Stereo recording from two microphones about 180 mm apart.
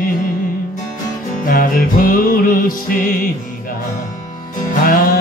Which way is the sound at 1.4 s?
50° left (ahead or behind).